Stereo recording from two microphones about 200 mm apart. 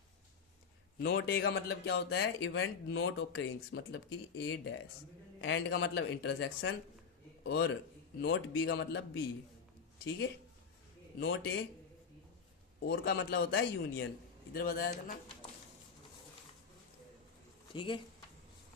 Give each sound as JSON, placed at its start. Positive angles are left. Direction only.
{"t": 0.9, "sound": "speech", "side_deg": 50}
{"t": 5.4, "sound": "speech", "side_deg": 65}
{"t": 7.4, "sound": "speech", "side_deg": 55}
{"t": 8.2, "sound": "speech", "side_deg": 70}
{"t": 11.2, "sound": "speech", "side_deg": 70}
{"t": 12.8, "sound": "speech", "side_deg": 55}
{"t": 14.5, "sound": "a man's voice", "side_deg": 50}
{"t": 17.7, "sound": "speech", "side_deg": 25}